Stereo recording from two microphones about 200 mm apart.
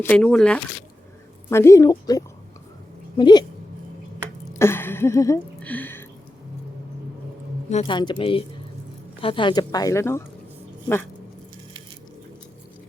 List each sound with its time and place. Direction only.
0.0 s a woman's voice: 5° left (ahead or behind); by 3.4 s 20° left (ahead or behind)
4.5 s a sound: 10° left (ahead or behind)
7.7 s speech: 35° left (ahead or behind)
7.9 s a woman's voice: 20° left (ahead or behind)